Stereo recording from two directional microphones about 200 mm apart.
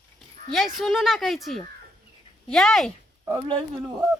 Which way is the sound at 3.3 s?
25° right (ahead or behind).